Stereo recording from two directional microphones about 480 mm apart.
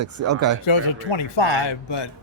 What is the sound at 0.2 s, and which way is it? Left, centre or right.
Speech, right.